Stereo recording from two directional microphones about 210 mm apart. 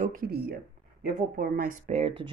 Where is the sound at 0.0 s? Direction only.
45° right (ahead or behind).